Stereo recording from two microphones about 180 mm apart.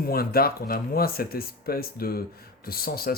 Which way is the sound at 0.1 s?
55° left (ahead or behind).